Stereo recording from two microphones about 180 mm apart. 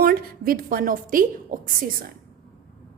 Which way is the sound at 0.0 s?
55° right (ahead or behind).